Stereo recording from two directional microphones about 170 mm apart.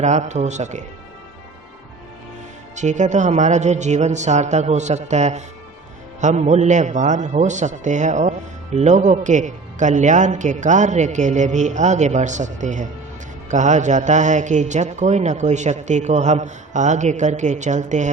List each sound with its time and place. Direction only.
0.0 s a man's voice: 45° right (ahead or behind)
2.7 s a man's voice: 45° right (ahead or behind)